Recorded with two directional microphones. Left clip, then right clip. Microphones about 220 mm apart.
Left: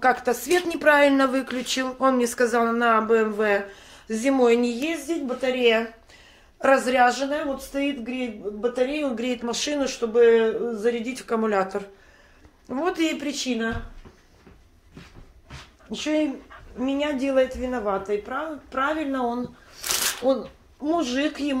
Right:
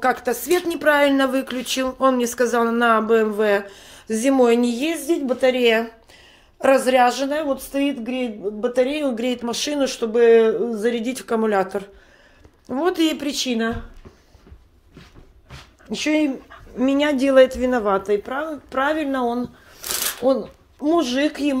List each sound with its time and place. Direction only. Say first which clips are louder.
0.0 s speech: right 1 dB; 10° right (ahead or behind); by 13.7 s 35° right (ahead or behind)
15.9 s speech: right 4 dB; 35° right (ahead or behind)
20.8 s speech: right 5 dB; 30° right (ahead or behind)